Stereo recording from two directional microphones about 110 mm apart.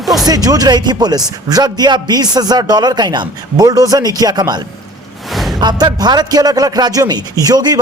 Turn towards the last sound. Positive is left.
turn(degrees=-35)  # may be behind; listen again after turning